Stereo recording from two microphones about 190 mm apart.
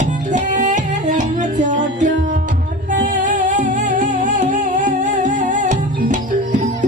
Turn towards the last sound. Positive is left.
turn(degrees=-40)  # may be behind; listen again after turning